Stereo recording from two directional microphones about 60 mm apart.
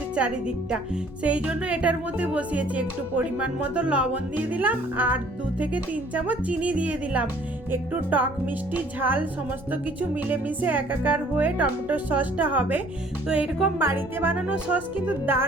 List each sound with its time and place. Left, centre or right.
0.2 s speech: centre
1.2 s music: right
7.7 s speech: right
10.0 s music: right
13.2 s speech: centre
13.7 s speech: right
14.4 s music: centre
14.9 s speech: right